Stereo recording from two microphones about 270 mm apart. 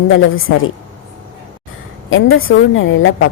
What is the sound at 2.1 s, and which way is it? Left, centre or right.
Speech, left.